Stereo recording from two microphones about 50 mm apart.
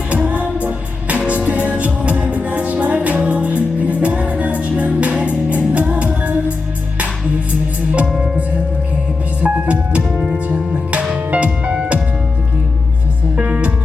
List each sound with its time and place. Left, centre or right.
0.3 s music: right
9.4 s music: right
13.3 s music: right